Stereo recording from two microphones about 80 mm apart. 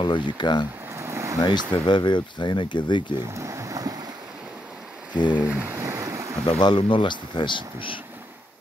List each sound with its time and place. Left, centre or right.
0.0 s speech: left
0.9 s a sound: right
1.4 s speech: left
3.3 s boat: right
5.1 s a sound: left
5.6 s ocean: right
6.4 s speech: left